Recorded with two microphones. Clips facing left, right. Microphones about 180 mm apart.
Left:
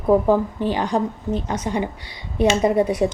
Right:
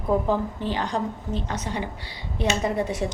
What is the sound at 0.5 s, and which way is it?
A woman's voice, 15° left (ahead or behind).